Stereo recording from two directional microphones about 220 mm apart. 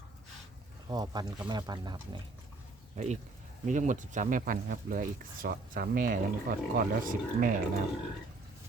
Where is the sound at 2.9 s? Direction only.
30° right (ahead or behind).